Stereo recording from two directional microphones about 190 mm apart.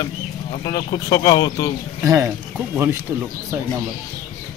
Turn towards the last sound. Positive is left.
turn(degrees=-15)  # may be behind; listen again after turning